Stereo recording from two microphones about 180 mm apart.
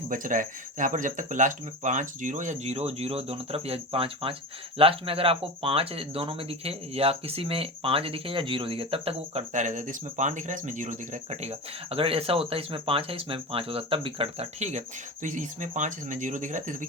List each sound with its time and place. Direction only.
0.1 s speech: 45° right (ahead or behind)